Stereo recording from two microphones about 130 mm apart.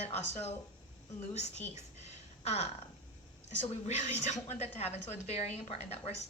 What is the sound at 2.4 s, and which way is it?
Speech, 55° left (ahead or behind).